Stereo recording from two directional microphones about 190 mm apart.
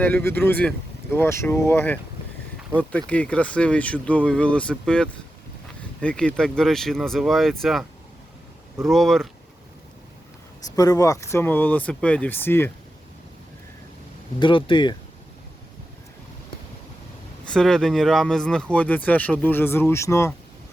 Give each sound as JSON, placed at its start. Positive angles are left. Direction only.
{"t": 0.0, "sound": "speech", "side_deg": 10}
{"t": 3.1, "sound": "speech", "side_deg": 5}
{"t": 10.7, "sound": "speech", "side_deg": 20}
{"t": 14.3, "sound": "speech", "side_deg": 25}
{"t": 17.4, "sound": "speech", "side_deg": 5}